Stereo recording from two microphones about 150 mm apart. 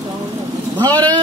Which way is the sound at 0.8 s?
25° right (ahead or behind).